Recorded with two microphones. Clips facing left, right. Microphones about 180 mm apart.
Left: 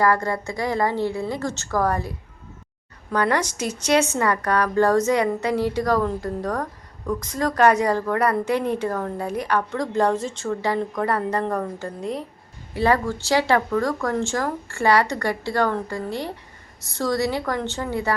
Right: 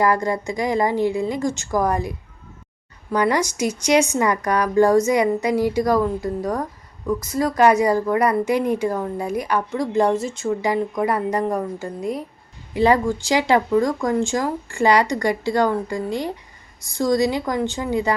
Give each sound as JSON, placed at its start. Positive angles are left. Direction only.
{"t": 0.0, "sound": "a woman's voice", "side_deg": -15}